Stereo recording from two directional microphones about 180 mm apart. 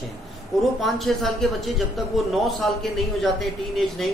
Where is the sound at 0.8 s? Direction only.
Centre (ahead or behind).